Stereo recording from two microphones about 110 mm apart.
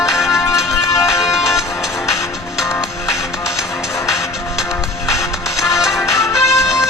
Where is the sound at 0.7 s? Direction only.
25° left (ahead or behind).